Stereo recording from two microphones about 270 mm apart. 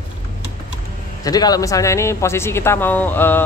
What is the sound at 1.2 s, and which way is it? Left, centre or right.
A man's voice, centre.